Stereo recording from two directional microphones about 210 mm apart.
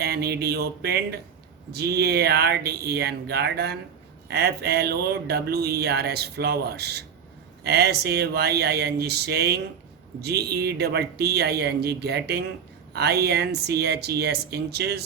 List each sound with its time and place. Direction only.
0.0 s speech: 50° right (ahead or behind)